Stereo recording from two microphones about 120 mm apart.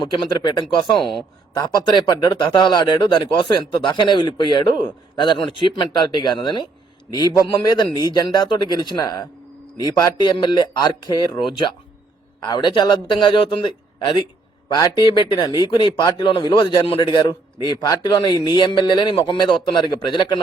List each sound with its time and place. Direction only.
0.0 s speech: 40° left (ahead or behind)
0.9 s speech: centre (ahead or behind)
1.5 s a man's voice: 35° left (ahead or behind)